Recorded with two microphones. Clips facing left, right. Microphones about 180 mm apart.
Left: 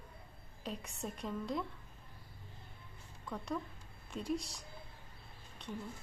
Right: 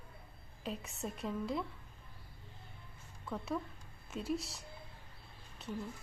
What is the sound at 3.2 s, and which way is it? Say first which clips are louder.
Speech: right 1 dB; 5° right (ahead or behind).